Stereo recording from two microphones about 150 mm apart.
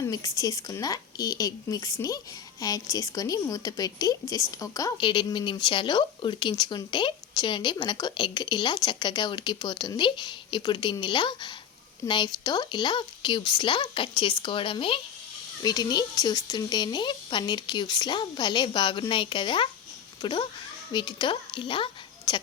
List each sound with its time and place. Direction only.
0.1 s a woman's voice: 20° left (ahead or behind)
15.6 s a woman's voice: 25° left (ahead or behind)